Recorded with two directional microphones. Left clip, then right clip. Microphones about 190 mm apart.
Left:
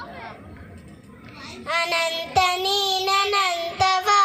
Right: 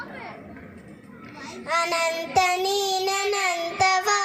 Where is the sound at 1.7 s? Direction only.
25° right (ahead or behind).